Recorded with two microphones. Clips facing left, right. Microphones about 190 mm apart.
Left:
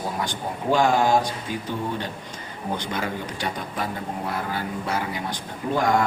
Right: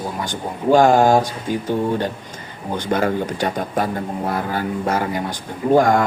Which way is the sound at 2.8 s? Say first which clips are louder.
Right 9 dB; 50° right (ahead or behind).